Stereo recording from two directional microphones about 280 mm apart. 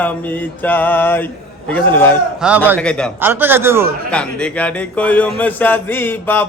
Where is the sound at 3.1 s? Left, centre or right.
Centre.